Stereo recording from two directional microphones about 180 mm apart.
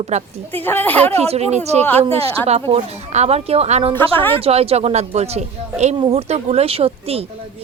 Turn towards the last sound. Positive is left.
turn(degrees=-35)  # may be behind; listen again after turning